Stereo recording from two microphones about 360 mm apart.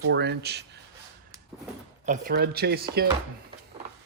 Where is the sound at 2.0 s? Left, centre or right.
Right.